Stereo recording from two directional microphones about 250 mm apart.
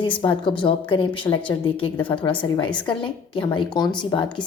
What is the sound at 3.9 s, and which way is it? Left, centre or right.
Speech, centre.